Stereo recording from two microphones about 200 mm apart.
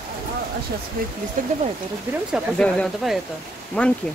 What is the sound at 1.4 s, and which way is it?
Speech, 40° right (ahead or behind).